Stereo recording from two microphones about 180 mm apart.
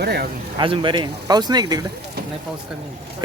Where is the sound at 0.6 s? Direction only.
25° right (ahead or behind).